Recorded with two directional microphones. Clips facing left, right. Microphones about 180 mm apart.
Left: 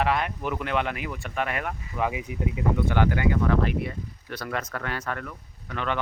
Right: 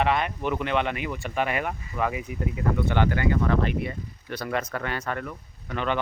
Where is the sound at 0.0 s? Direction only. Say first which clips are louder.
Right 1 dB; 5° left (ahead or behind).